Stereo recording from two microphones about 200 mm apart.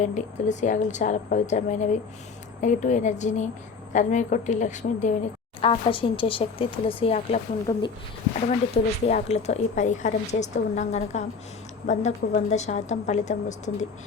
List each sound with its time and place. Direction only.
0.0 s speech: 35° left (ahead or behind)
7.7 s speech: 20° left (ahead or behind)
8.4 s speech: 30° left (ahead or behind)